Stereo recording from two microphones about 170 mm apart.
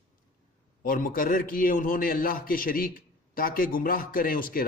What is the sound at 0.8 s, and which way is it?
A man's voice, 55° left (ahead or behind).